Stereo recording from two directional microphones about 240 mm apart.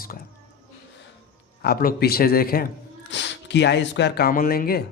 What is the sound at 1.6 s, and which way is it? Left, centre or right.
Speech, left.